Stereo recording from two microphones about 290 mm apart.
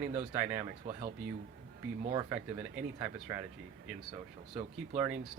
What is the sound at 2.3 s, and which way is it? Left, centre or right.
Speech, centre.